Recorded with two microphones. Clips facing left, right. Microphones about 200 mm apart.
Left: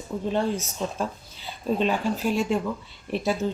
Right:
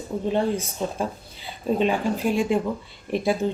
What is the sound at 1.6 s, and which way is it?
Speech, 10° right (ahead or behind).